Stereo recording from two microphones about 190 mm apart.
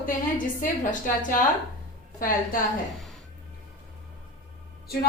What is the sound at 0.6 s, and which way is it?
A woman's voice, 45° left (ahead or behind).